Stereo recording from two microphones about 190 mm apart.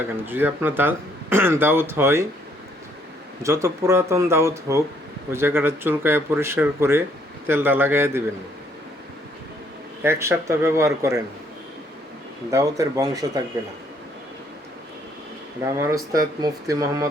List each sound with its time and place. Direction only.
0.3 s speech: 10° right (ahead or behind)
3.4 s speech: 15° right (ahead or behind)
10.0 s speech: 15° right (ahead or behind)
12.5 s speech: 15° right (ahead or behind)
15.8 s speech: 15° right (ahead or behind)